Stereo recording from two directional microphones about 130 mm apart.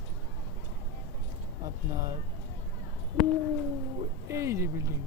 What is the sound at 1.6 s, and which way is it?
Speech, 30° right (ahead or behind).